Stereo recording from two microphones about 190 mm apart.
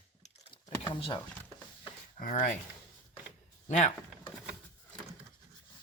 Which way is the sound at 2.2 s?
45° left (ahead or behind).